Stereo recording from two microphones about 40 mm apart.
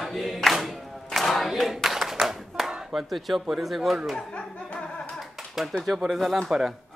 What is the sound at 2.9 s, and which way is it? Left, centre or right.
Speech, centre.